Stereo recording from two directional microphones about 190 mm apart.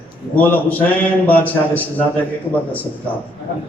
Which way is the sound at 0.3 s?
10° left (ahead or behind).